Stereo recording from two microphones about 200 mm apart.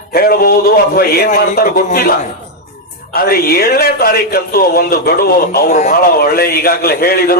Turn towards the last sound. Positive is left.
turn(degrees=50)  # may be behind; listen again after turning